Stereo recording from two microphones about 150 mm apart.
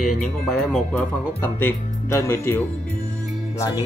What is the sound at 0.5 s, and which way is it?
Speech, 5° left (ahead or behind).